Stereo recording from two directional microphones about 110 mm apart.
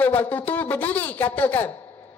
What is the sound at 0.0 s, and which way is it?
A woman's voice, 20° left (ahead or behind).